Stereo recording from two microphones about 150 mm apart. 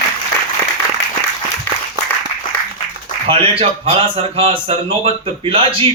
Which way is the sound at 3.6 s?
40° right (ahead or behind).